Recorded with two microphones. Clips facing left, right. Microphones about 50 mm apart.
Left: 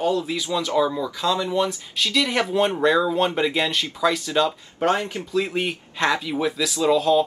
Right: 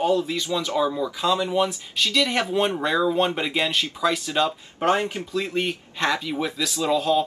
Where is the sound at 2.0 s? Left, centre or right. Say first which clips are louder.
Left 1 dB; centre.